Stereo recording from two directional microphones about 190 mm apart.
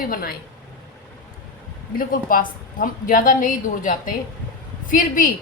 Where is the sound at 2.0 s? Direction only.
45° left (ahead or behind).